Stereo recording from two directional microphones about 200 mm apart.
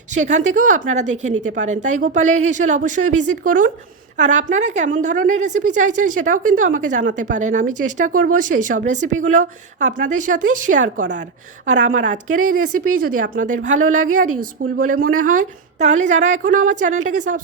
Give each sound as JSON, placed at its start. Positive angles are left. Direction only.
{"t": 0.1, "sound": "a woman's voice", "side_deg": -35}